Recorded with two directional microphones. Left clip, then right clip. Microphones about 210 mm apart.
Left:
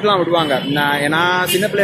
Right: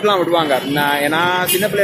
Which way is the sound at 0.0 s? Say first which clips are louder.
Even; 5° right (ahead or behind).